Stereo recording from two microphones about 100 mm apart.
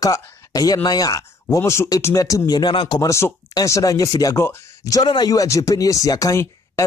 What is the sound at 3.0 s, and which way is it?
Speech, 30° left (ahead or behind).